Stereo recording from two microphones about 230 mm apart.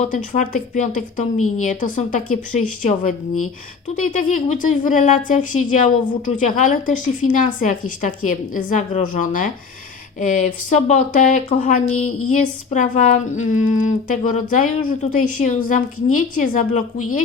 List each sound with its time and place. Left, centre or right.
0.0 s a woman's voice: left